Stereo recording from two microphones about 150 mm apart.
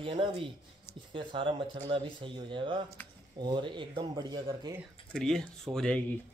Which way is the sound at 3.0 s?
15° left (ahead or behind).